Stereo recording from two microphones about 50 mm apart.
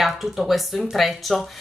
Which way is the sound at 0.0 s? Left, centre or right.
Centre.